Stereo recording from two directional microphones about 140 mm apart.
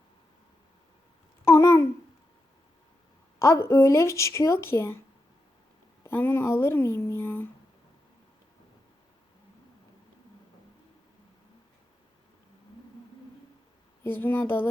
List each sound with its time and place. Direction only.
1.5 s babbling: 20° left (ahead or behind)
3.3 s speech: 20° left (ahead or behind)
6.0 s speech: 15° left (ahead or behind)
14.0 s speech: 15° left (ahead or behind)